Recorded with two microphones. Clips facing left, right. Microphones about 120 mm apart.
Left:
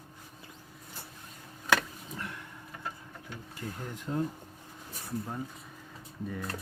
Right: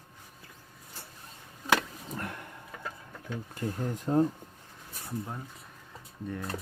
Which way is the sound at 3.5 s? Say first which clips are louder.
Right 6 dB; 40° right (ahead or behind).